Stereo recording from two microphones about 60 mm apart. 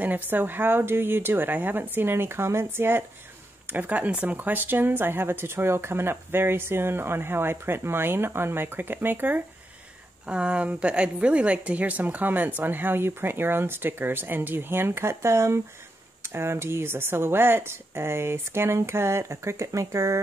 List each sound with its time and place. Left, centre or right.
0.0 s speech: right
3.7 s speech: right
10.2 s speech: centre; by 20.2 s right